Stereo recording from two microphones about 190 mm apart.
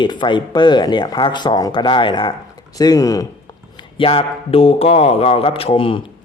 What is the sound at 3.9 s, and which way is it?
A man's voice, 30° left (ahead or behind).